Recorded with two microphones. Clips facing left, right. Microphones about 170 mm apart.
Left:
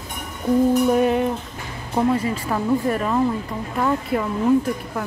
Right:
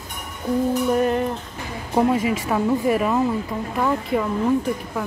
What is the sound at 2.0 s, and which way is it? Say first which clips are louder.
Speech: right 1 dB; 10° right (ahead or behind).